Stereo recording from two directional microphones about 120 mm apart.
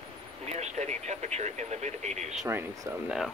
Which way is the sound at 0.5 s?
70° right (ahead or behind).